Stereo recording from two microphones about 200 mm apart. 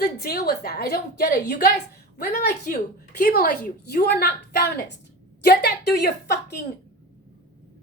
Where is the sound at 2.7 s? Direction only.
45° left (ahead or behind).